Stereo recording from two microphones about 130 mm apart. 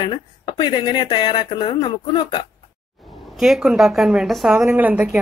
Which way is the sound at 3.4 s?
Centre (ahead or behind).